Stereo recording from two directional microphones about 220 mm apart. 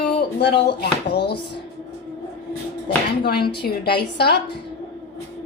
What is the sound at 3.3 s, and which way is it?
Speech, 45° left (ahead or behind).